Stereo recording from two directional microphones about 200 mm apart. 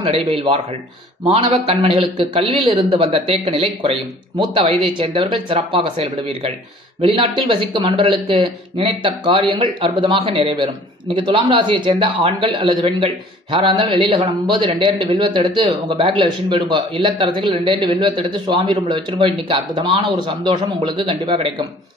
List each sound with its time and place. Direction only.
0.0 s speech: 30° right (ahead or behind)